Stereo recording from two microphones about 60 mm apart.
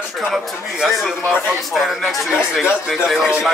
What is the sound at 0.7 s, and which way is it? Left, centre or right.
Speech, centre.